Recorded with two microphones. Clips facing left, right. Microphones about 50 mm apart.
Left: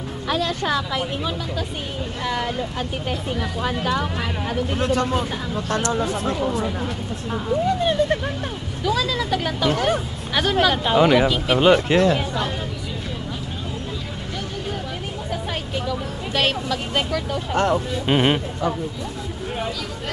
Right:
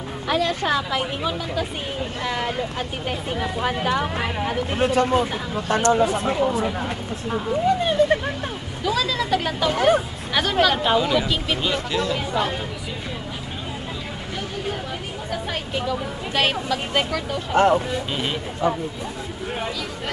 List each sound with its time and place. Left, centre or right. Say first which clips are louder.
0.3 s speech: right 1 dB; centre
10.3 s speech: even; centre
11.0 s speech: left 5 dB; left
11.2 s speech: left 5 dB; centre
11.6 s speech: left 8 dB; left
15.7 s speech: right 2 dB; centre
18.0 s speech: left 8 dB; left